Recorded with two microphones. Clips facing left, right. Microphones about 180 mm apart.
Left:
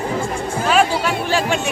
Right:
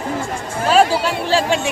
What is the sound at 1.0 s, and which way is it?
Speech, 30° right (ahead or behind).